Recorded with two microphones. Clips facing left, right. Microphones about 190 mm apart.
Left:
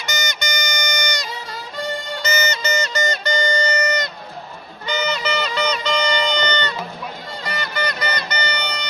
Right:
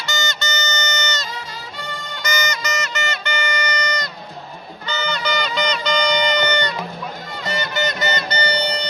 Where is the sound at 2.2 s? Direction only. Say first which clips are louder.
Even; 25° left (ahead or behind).